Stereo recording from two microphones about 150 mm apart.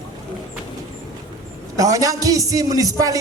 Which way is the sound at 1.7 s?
20° right (ahead or behind).